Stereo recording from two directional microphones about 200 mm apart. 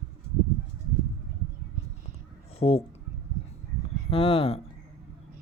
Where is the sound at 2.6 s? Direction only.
30° left (ahead or behind).